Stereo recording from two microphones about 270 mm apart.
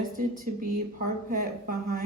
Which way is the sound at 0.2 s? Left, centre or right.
Right.